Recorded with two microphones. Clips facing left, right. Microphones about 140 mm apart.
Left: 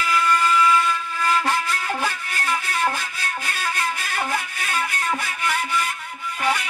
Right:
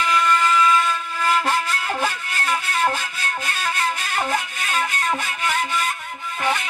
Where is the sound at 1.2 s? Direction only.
15° right (ahead or behind).